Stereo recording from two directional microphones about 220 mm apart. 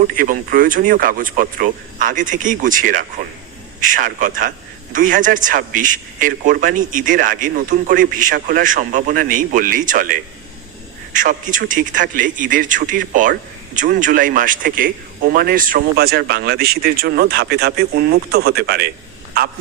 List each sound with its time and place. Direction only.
0.1 s speech: 40° right (ahead or behind)